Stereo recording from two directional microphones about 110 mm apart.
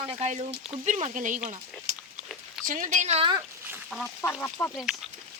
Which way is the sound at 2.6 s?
5° right (ahead or behind).